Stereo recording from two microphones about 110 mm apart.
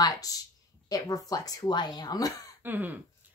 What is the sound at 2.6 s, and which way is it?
Throat clearing, 15° right (ahead or behind).